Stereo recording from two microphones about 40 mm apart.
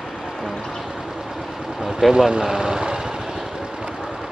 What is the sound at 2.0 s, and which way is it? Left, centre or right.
Speech, centre.